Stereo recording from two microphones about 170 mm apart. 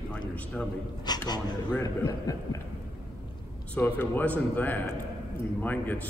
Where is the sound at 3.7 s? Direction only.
10° left (ahead or behind).